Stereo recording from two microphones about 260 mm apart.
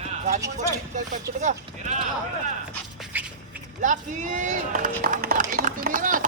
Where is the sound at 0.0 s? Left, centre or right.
Right.